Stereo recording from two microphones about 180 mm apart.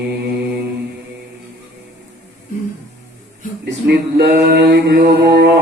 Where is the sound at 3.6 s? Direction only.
65° right (ahead or behind).